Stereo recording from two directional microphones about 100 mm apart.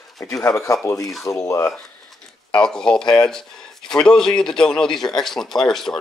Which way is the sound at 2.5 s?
5° left (ahead or behind).